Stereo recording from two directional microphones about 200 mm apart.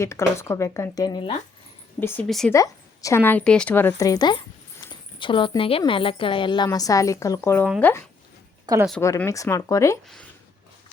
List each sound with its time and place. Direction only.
0.0 s a woman's voice: 15° left (ahead or behind)
2.0 s speech: 10° left (ahead or behind)
2.5 s a woman's voice: 15° left (ahead or behind)
8.6 s speech: 15° right (ahead or behind)
9.0 s a woman's voice: 15° left (ahead or behind)